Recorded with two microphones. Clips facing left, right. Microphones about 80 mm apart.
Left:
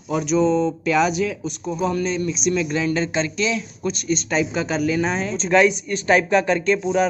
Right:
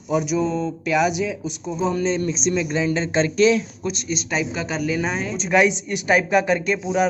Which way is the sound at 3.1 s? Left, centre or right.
Right.